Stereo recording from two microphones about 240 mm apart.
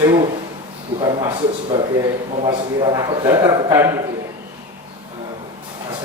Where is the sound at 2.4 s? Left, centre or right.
Centre.